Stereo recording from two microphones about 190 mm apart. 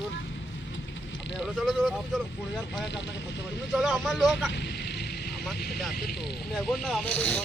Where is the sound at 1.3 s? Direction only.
Centre (ahead or behind).